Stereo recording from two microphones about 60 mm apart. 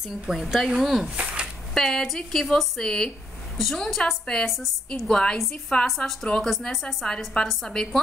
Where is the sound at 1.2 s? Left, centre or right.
Right.